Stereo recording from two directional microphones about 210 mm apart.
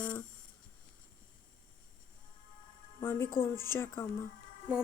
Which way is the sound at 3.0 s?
10° left (ahead or behind).